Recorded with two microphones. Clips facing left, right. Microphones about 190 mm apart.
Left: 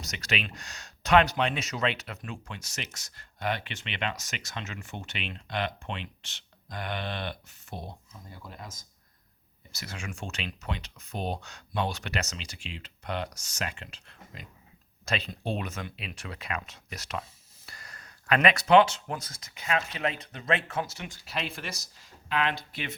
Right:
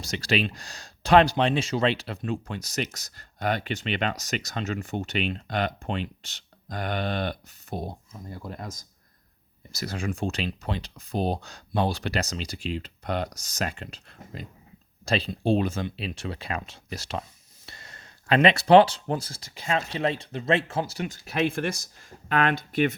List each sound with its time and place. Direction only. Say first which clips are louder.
0.0 s speech: right 8 dB; 30° right (ahead or behind)
9.7 s speech: right 9 dB; 35° right (ahead or behind)